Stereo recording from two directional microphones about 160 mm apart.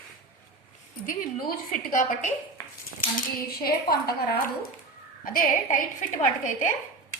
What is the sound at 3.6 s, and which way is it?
A woman's voice, 70° left (ahead or behind).